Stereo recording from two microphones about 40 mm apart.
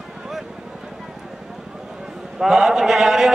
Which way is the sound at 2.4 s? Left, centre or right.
Centre.